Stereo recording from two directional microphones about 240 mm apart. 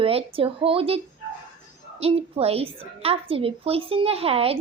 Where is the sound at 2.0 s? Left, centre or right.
Right.